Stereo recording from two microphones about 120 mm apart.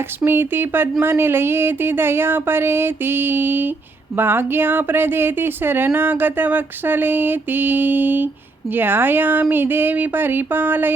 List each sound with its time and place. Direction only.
0.3 s speech: 20° right (ahead or behind)
1.0 s a sound: 20° right (ahead or behind)
4.2 s speech: 20° right (ahead or behind)